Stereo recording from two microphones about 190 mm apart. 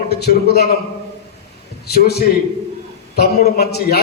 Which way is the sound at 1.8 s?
55° left (ahead or behind).